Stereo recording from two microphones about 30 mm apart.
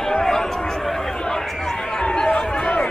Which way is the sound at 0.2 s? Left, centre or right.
Centre.